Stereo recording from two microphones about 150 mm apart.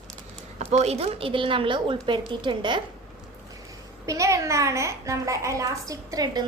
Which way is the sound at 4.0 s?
20° right (ahead or behind).